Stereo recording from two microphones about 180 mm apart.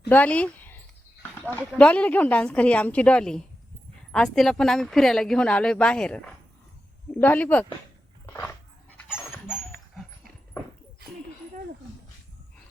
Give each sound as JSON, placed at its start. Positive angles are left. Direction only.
{"t": 0.1, "sound": "speech", "side_deg": 10}
{"t": 1.4, "sound": "a sound", "side_deg": 10}
{"t": 1.8, "sound": "a woman's voice", "side_deg": 5}